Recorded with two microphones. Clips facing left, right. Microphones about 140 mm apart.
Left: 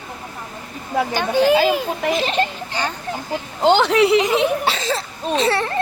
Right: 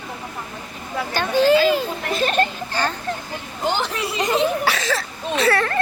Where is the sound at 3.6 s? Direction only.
75° left (ahead or behind).